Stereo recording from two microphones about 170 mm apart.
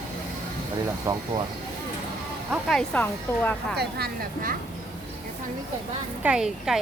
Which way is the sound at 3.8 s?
70° right (ahead or behind).